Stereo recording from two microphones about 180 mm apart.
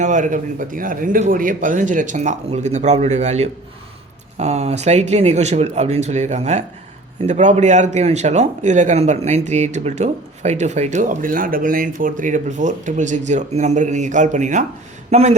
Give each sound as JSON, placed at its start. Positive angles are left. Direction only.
{"t": 0.0, "sound": "speech", "side_deg": -45}